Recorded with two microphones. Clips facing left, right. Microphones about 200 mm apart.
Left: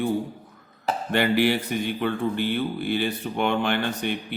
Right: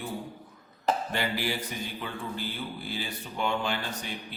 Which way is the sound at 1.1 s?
65° left (ahead or behind).